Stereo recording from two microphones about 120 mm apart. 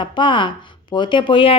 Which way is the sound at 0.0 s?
40° left (ahead or behind).